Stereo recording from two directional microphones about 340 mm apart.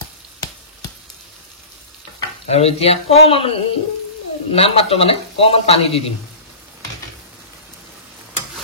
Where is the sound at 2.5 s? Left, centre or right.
Centre.